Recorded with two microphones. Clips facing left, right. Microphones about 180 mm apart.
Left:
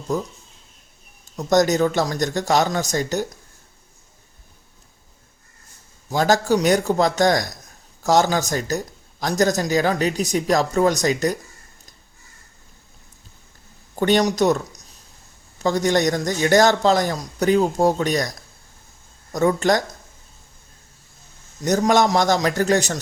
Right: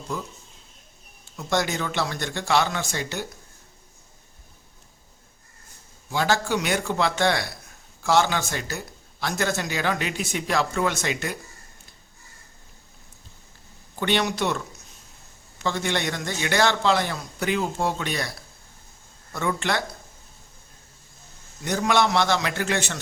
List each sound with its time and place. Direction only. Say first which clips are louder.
0.1 s a man's voice: left 8 dB; 40° left (ahead or behind)
1.4 s a man's voice: left 9 dB; 40° left (ahead or behind)
6.1 s a man's voice: left 6 dB; 40° left (ahead or behind)
13.9 s a man's voice: left 6 dB; 40° left (ahead or behind)
21.6 s a man's voice: left 5 dB; 40° left (ahead or behind)